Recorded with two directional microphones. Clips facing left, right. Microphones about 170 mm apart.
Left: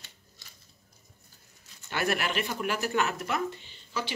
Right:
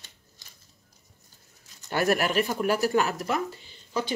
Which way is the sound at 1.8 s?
40° right (ahead or behind).